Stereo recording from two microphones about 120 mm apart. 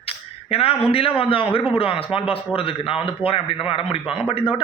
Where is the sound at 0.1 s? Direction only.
55° left (ahead or behind).